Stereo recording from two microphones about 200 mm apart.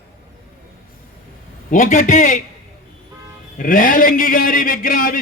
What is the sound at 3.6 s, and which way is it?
A man's voice, 40° left (ahead or behind).